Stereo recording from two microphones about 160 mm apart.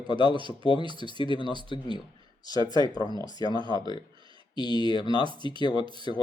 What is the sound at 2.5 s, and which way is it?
Speech, 25° right (ahead or behind).